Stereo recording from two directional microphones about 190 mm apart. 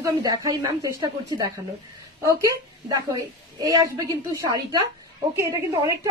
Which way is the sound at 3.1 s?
20° right (ahead or behind).